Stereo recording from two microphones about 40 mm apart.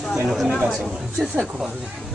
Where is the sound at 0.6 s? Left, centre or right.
Centre.